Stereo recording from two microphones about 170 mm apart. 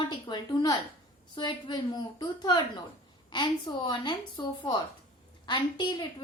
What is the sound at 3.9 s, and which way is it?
A woman's voice, 25° left (ahead or behind).